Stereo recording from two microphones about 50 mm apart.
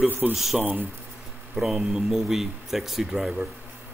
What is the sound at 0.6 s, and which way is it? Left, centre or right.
Speech, right.